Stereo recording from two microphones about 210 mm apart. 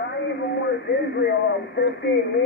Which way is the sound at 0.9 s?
50° left (ahead or behind).